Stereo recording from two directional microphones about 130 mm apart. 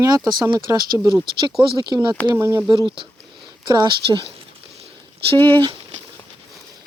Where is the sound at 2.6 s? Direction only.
35° right (ahead or behind).